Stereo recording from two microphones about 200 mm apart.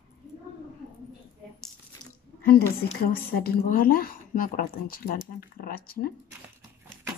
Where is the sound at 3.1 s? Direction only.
50° left (ahead or behind).